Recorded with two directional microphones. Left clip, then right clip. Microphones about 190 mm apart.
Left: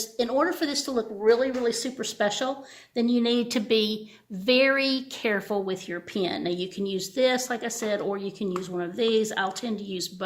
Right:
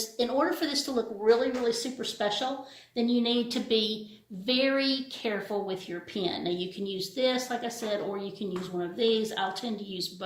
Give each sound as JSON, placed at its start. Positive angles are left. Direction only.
{"t": 0.2, "sound": "speech", "side_deg": 45}